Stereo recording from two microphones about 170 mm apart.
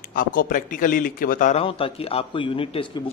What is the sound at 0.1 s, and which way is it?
Speech, 55° left (ahead or behind).